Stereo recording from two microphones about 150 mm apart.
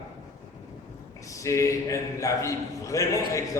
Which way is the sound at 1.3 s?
20° left (ahead or behind).